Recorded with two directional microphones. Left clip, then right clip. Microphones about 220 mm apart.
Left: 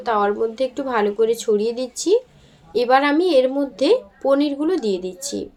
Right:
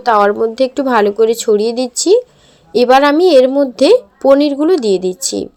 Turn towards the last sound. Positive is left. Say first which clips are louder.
# right 10 dB
turn(degrees=-40)  # may be behind; listen again after turning